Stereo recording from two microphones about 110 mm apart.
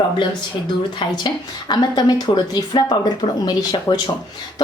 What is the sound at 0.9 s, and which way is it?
Speech, 40° left (ahead or behind).